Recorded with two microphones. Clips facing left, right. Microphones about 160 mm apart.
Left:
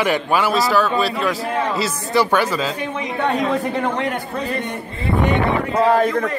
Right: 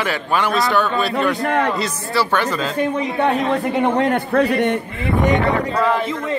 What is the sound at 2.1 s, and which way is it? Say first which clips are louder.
Speech: left 3 dB; 15° left (ahead or behind).